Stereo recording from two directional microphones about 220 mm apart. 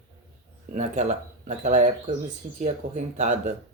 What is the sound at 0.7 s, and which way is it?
Speech, 30° right (ahead or behind).